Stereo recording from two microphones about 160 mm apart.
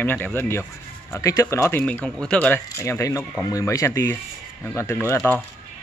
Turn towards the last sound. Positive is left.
turn(degrees=15)  # may be behind; listen again after turning